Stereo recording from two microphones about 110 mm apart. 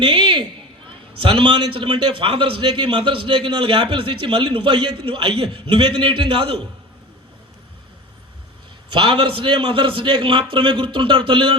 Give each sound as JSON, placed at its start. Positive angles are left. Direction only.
{"t": 0.0, "sound": "a sound", "side_deg": -50}
{"t": 0.9, "sound": "a man's voice", "side_deg": -55}
{"t": 8.9, "sound": "a man's voice", "side_deg": -50}